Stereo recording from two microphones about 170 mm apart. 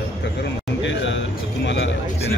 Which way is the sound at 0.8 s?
90° left.